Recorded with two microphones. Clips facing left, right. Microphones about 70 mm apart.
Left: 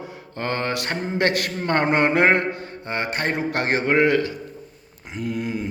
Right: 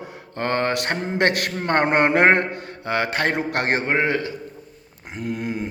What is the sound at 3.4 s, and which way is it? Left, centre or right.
Speech, right.